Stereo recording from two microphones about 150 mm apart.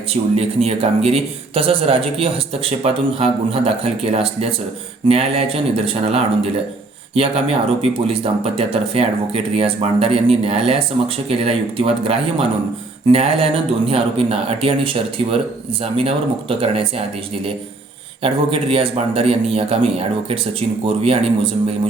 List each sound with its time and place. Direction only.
0.1 s speech: 40° right (ahead or behind)
18.7 s speech: 40° right (ahead or behind)